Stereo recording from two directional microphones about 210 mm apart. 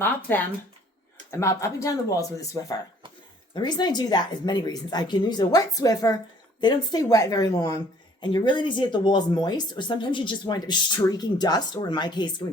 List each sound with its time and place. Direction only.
0.0 s speech: 10° left (ahead or behind)